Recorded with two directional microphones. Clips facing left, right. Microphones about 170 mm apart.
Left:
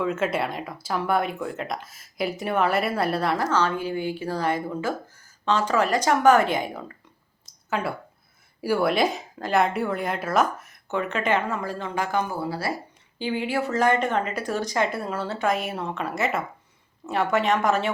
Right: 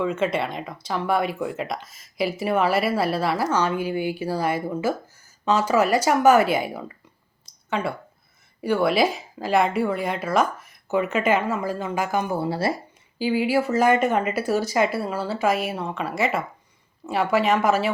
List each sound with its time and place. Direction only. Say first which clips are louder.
0.0 s speech: right 1 dB; 5° left (ahead or behind)
8.6 s speech: right 2 dB; 5° left (ahead or behind)
12.3 s speech: right 5 dB; 25° right (ahead or behind)
13.1 s speech: right 5 dB; 5° right (ahead or behind)